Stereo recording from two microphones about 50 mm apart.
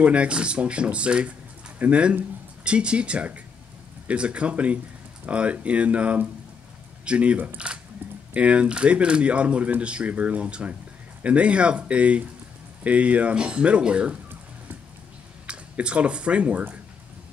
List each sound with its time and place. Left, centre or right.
0.0 s speech: right
15.4 s speech: right